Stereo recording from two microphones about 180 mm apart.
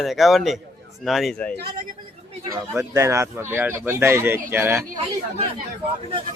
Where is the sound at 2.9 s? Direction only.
15° right (ahead or behind).